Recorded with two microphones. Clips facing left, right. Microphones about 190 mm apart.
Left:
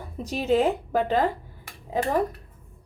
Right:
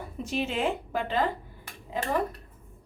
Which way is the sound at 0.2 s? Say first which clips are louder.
Left 7 dB; 40° left (ahead or behind).